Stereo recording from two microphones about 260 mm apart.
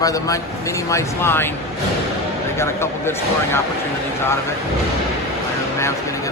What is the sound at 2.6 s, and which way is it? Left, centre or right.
A man's voice, centre.